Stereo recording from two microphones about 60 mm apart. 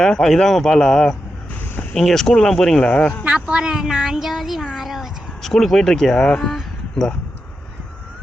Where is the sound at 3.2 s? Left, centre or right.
Centre.